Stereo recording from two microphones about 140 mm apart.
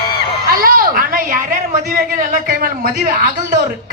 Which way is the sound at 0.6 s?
85° right.